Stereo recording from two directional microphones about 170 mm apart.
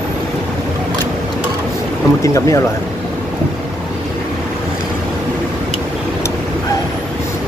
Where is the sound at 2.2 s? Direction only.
20° left (ahead or behind).